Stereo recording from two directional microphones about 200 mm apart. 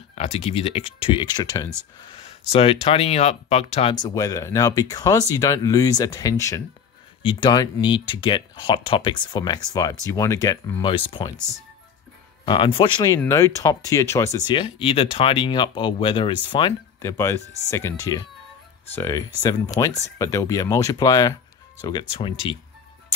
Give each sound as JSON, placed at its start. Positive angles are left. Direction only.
{"t": 0.1, "sound": "speech", "side_deg": 30}
{"t": 2.0, "sound": "a sound", "side_deg": 25}
{"t": 2.5, "sound": "speech", "side_deg": 30}
{"t": 3.9, "sound": "speech", "side_deg": 20}
{"t": 12.4, "sound": "speech", "side_deg": 25}